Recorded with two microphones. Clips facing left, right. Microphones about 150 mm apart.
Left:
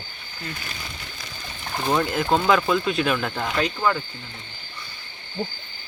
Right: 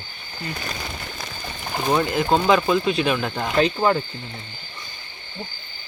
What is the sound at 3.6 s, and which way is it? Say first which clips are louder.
Speech: right 5 dB; 25° right (ahead or behind).